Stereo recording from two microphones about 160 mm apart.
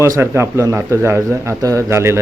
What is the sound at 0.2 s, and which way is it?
A man's voice, 15° right (ahead or behind).